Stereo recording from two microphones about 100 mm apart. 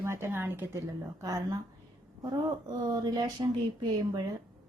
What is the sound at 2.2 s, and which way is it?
A woman's voice, 40° right (ahead or behind).